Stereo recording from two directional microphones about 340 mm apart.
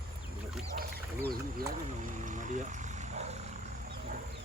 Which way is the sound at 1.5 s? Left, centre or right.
Right.